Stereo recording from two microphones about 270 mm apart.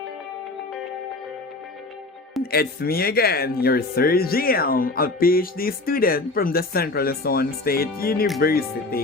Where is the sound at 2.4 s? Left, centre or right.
Left.